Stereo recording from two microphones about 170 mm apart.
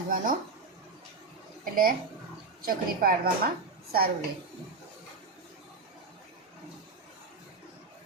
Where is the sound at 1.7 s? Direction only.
55° right (ahead or behind).